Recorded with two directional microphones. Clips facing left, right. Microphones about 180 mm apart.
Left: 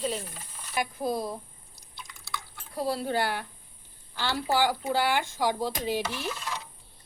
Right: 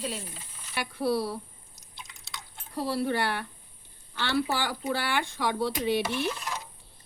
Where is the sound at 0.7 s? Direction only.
75° right (ahead or behind).